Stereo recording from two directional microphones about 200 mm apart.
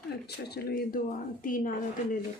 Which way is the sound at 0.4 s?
50° left (ahead or behind).